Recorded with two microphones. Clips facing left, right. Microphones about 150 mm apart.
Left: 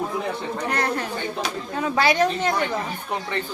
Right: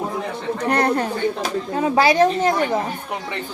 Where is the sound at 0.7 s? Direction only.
30° right (ahead or behind).